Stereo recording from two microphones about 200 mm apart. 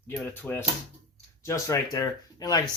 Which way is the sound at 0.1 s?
10° left (ahead or behind).